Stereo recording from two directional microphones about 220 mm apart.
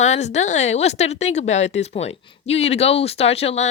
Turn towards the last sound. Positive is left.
turn(degrees=30)  # may be behind; listen again after turning